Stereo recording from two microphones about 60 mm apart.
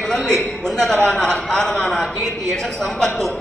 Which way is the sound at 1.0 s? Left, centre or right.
Centre.